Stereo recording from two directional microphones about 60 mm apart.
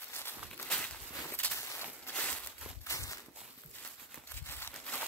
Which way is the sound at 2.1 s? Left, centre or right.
Left.